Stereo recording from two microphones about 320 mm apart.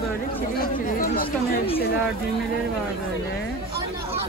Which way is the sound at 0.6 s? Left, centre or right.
Left.